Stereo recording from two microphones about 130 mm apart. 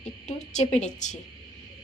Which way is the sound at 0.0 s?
65° left (ahead or behind).